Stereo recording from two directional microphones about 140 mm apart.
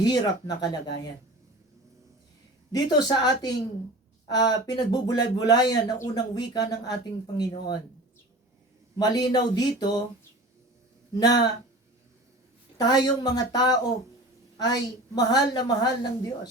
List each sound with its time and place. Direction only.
0.0 s speech: 30° left (ahead or behind)
2.7 s speech: 30° left (ahead or behind)
9.0 s speech: 30° left (ahead or behind)
11.1 s speech: 30° left (ahead or behind)
12.7 s speech: 30° left (ahead or behind)